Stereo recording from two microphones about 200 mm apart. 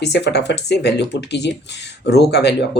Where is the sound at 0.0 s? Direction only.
60° left (ahead or behind).